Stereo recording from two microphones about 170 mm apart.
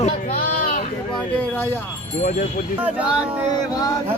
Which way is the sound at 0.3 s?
60° left (ahead or behind).